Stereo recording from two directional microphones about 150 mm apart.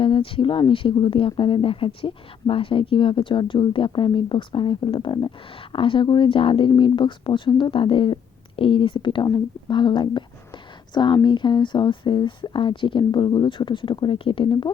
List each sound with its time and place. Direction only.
0.0 s speech: 35° left (ahead or behind)